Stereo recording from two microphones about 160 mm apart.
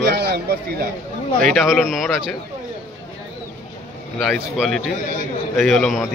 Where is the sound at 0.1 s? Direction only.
90° right.